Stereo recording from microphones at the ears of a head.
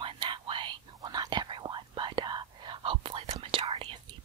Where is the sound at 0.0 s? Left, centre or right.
Right.